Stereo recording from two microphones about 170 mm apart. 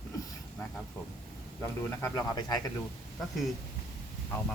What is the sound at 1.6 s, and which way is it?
Speech, 15° left (ahead or behind).